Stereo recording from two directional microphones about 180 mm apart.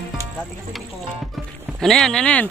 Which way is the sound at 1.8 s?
Centre (ahead or behind).